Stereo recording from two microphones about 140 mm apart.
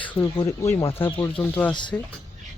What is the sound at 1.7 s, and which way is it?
Speech, 35° left (ahead or behind).